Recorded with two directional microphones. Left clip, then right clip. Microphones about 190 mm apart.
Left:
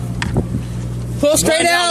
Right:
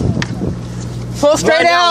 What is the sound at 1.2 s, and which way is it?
Speech, 45° left (ahead or behind).